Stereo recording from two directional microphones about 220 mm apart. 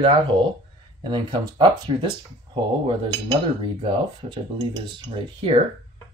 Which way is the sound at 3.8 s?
20° right (ahead or behind).